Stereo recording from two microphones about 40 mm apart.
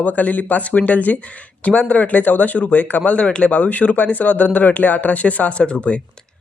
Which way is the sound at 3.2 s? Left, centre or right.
Left.